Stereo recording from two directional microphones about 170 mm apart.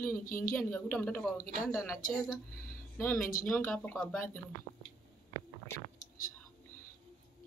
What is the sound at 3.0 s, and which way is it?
Speech, 10° left (ahead or behind).